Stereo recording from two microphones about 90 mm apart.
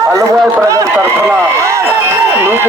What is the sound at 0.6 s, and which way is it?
Speech, 35° right (ahead or behind).